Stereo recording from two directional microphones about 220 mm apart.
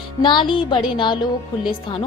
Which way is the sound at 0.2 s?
20° left (ahead or behind).